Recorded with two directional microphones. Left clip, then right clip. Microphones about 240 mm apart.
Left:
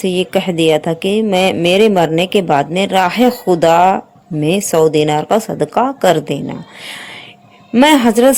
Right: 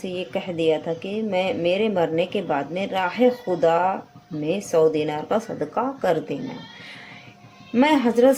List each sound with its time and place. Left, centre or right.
0.0 s speech: left
7.7 s a woman's voice: left